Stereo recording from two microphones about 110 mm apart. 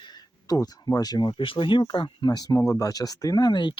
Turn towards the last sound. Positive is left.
turn(degrees=40)  # may be behind; listen again after turning